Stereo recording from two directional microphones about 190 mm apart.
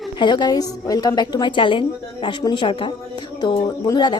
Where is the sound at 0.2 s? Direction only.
25° left (ahead or behind).